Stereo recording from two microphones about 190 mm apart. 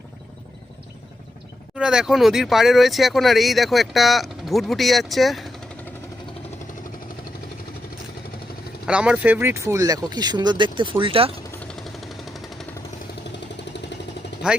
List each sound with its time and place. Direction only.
1.7 s speech: 5° right (ahead or behind)
8.9 s speech: 5° right (ahead or behind); by 11.3 s 30° right (ahead or behind)
11.7 s a sound: centre (ahead or behind)